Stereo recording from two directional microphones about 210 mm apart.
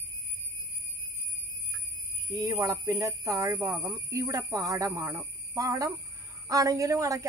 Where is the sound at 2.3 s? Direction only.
15° right (ahead or behind).